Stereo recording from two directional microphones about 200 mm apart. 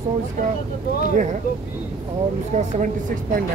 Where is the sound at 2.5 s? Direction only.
35° right (ahead or behind).